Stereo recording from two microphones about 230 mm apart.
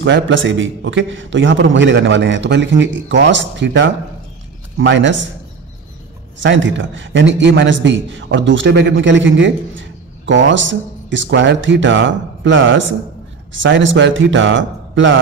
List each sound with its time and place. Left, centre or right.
0.0 s a man's voice: right
6.4 s a man's voice: right